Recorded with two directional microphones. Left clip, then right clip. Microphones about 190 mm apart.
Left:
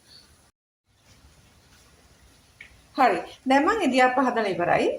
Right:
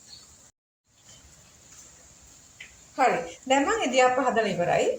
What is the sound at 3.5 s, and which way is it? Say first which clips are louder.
A woman's voice: left 3 dB; 45° left (ahead or behind).